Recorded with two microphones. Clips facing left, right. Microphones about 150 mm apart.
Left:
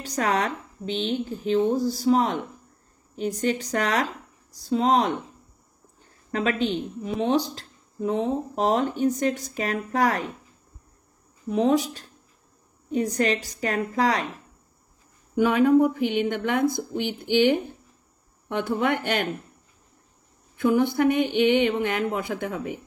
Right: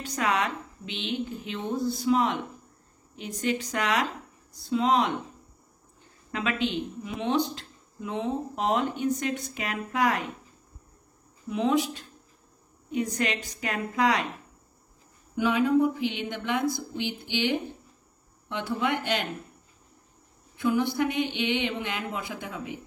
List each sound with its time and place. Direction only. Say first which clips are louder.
0.0 s speech: left 3 dB; 40° left (ahead or behind)
6.3 s speech: left 4 dB; 40° left (ahead or behind)
11.4 s speech: left 4 dB; 40° left (ahead or behind)
15.3 s a woman's voice: left 5 dB; 50° left (ahead or behind)
20.5 s a woman's voice: left 4 dB; 50° left (ahead or behind)